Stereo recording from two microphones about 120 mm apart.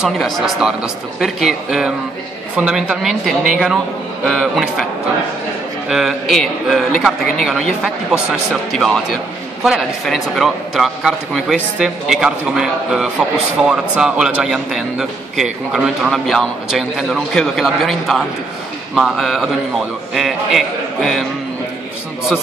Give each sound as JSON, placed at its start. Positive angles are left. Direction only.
{"t": 0.0, "sound": "a man's voice", "side_deg": -5}
{"t": 5.9, "sound": "a man's voice", "side_deg": 0}